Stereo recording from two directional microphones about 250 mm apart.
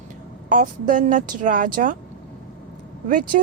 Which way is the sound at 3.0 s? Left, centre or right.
Right.